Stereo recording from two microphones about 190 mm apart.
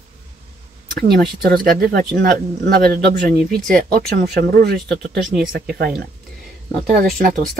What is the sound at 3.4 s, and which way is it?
Speech, centre (ahead or behind).